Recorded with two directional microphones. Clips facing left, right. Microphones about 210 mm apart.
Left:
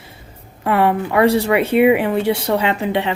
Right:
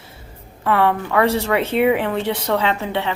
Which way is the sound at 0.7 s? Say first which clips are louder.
Left 2 dB; 15° left (ahead or behind).